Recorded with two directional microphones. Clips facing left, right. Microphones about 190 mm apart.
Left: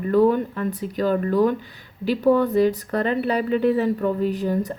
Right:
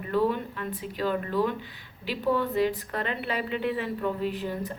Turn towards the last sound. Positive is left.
turn(degrees=45)  # may be behind; listen again after turning